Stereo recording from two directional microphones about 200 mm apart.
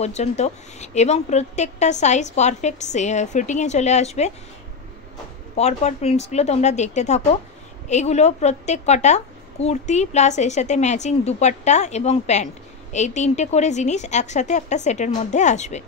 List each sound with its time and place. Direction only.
0.0 s a woman's voice: 35° left (ahead or behind)
5.6 s a woman's voice: 35° left (ahead or behind)